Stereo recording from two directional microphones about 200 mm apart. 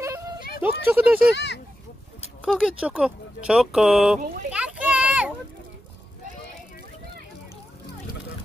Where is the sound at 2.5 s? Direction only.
5° right (ahead or behind).